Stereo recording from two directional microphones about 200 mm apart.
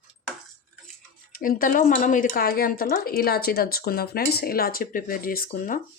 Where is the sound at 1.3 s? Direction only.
45° left (ahead or behind).